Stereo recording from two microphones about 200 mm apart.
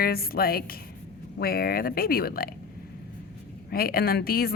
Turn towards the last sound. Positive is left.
turn(degrees=50)  # may be behind; listen again after turning